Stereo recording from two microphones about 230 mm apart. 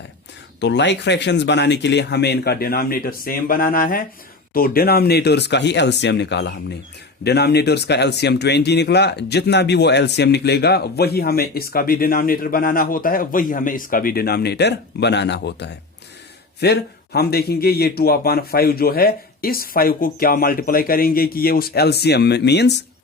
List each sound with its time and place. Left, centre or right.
0.6 s speech: left